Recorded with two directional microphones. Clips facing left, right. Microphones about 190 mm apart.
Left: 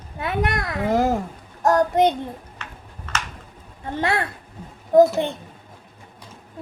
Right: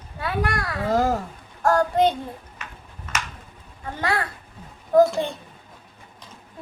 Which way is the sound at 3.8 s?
25° left (ahead or behind).